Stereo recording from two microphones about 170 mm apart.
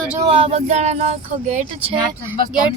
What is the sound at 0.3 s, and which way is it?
Speech, 35° right (ahead or behind).